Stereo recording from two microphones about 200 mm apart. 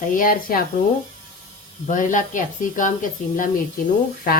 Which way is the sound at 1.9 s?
40° left (ahead or behind).